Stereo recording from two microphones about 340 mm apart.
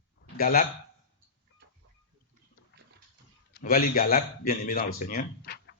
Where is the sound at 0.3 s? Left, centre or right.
Left.